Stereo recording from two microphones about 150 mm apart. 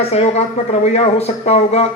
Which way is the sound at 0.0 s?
45° left (ahead or behind).